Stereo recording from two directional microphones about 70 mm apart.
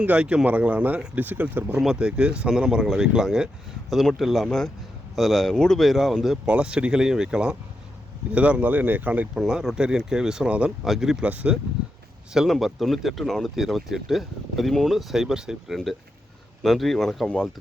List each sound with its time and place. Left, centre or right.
0.0 s speech: centre
1.8 s speech: centre
6.4 s speech: centre
9.3 s speech: centre
11.3 s speech: right
12.3 s speech: centre